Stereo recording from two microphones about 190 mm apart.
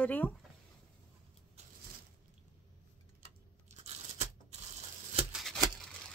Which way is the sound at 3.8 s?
35° right (ahead or behind).